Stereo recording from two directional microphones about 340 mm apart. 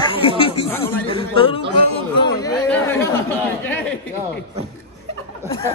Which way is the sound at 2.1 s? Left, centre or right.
Centre.